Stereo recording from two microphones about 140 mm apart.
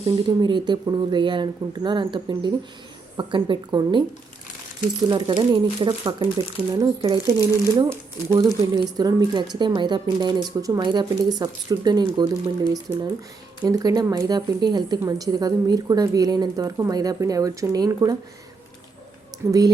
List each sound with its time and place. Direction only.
0.3 s speech: 35° right (ahead or behind)
5.0 s speech: 30° right (ahead or behind)
13.6 s speech: 25° right (ahead or behind)
19.5 s speech: 25° right (ahead or behind)